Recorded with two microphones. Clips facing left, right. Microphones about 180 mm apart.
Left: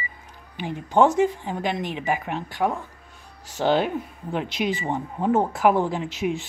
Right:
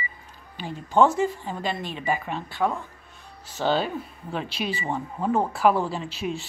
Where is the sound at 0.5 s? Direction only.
15° left (ahead or behind).